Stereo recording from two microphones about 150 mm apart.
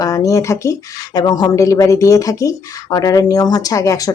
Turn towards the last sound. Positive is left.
turn(degrees=20)  # may be behind; listen again after turning